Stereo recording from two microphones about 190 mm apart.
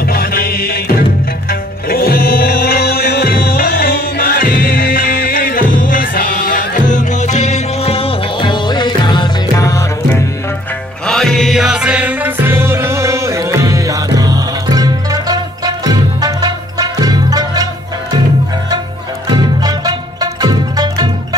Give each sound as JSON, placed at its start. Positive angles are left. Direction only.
{"t": 0.0, "sound": "music", "side_deg": 50}
{"t": 11.1, "sound": "music", "side_deg": 0}
{"t": 19.3, "sound": "music", "side_deg": -20}